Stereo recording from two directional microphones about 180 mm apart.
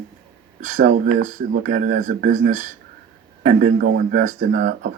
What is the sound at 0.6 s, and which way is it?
Speech, 45° right (ahead or behind).